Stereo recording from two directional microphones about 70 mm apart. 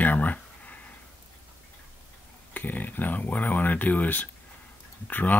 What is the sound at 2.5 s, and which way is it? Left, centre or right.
Speech, left.